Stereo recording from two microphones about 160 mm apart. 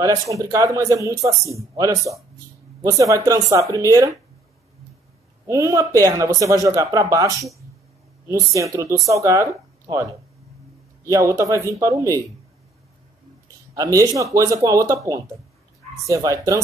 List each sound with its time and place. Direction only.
0.0 s speech: 20° right (ahead or behind)
5.5 s speech: 20° right (ahead or behind)
11.1 s speech: 20° right (ahead or behind)
13.7 s speech: 20° right (ahead or behind)
16.1 s speech: 20° right (ahead or behind)